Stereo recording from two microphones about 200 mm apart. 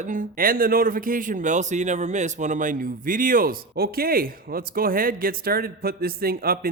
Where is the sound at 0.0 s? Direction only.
40° right (ahead or behind).